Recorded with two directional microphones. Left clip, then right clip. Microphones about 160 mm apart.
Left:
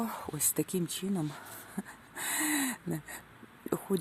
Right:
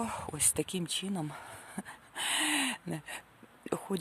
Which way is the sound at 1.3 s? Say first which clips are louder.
Even; 25° right (ahead or behind).